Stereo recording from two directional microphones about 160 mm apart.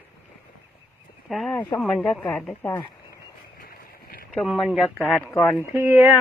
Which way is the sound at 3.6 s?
70° left (ahead or behind).